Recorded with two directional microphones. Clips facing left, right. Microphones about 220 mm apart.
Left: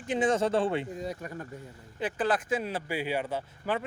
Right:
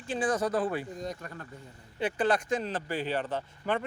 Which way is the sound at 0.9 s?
10° left (ahead or behind).